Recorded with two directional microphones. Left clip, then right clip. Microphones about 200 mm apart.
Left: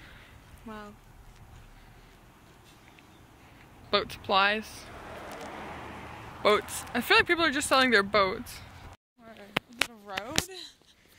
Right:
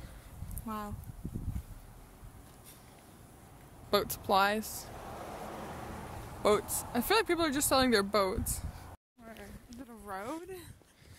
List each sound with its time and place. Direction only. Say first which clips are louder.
0.7 s speech: right 3 dB; 60° right (ahead or behind)
3.9 s speech: left 3 dB; 20° right (ahead or behind)
6.4 s speech: left 4 dB; 5° right (ahead or behind)
9.4 s a sound: left 19 dB; 10° right (ahead or behind)